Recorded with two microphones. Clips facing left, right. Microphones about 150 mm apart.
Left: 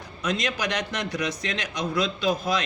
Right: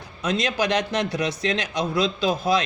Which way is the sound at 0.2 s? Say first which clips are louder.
Right 4 dB; 30° right (ahead or behind).